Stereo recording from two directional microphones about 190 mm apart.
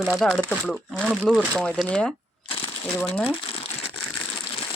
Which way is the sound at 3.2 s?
30° left (ahead or behind).